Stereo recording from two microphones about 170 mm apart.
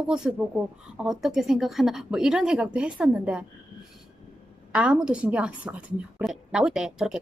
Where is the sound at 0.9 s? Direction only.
5° right (ahead or behind).